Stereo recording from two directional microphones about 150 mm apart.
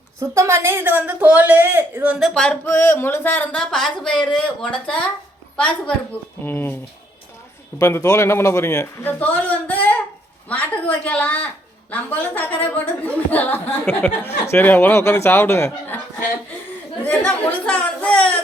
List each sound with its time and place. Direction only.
0.2 s a woman's voice: 20° right (ahead or behind); by 2.6 s 5° left (ahead or behind)
2.6 s speech: 20° left (ahead or behind)
6.4 s speech: 15° left (ahead or behind)
7.8 s speech: 20° left (ahead or behind)
17.7 s speech: 10° left (ahead or behind)